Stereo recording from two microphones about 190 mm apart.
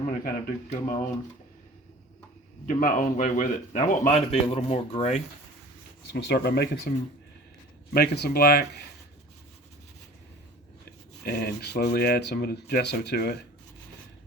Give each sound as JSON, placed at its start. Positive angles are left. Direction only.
{"t": 0.0, "sound": "speech", "side_deg": 40}
{"t": 2.6, "sound": "speech", "side_deg": 45}
{"t": 6.1, "sound": "speech", "side_deg": 60}
{"t": 7.9, "sound": "speech", "side_deg": 55}
{"t": 11.2, "sound": "speech", "side_deg": 55}